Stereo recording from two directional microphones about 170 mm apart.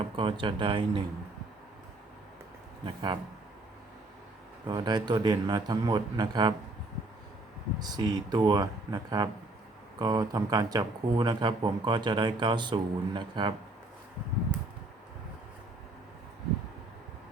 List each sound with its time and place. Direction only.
0.0 s speech: 30° right (ahead or behind)
2.8 s speech: 25° right (ahead or behind)
4.6 s speech: 25° right (ahead or behind)
7.8 s speech: 25° right (ahead or behind)